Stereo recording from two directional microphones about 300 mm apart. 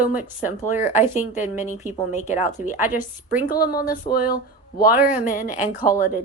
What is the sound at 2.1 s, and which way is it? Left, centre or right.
Speech, left.